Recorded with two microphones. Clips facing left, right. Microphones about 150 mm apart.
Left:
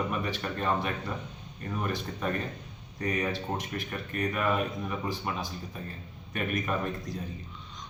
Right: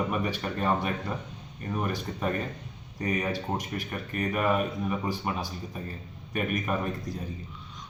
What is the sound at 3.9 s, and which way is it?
A man's voice, 10° right (ahead or behind).